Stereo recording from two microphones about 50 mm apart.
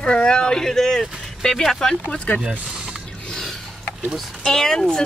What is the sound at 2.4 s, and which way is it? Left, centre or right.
Speech, right.